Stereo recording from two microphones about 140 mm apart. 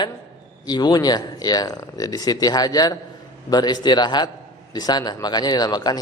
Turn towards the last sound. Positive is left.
turn(degrees=30)  # may be behind; listen again after turning